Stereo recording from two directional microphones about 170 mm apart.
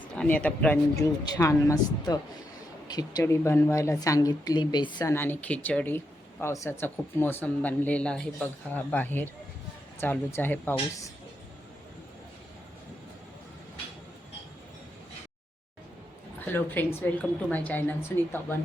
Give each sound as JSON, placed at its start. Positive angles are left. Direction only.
{"t": 0.2, "sound": "speech", "side_deg": 10}
{"t": 0.9, "sound": "speech", "side_deg": 20}
{"t": 5.1, "sound": "speech", "side_deg": 10}
{"t": 16.5, "sound": "speech", "side_deg": 10}